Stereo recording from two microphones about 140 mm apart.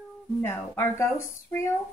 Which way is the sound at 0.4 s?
15° left (ahead or behind).